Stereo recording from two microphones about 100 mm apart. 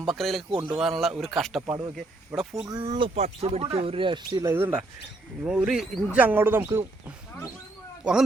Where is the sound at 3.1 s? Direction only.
90° right; by 4.5 s 45° right (ahead or behind).